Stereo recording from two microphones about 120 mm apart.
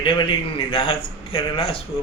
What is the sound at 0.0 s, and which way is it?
A man's voice, 40° left (ahead or behind).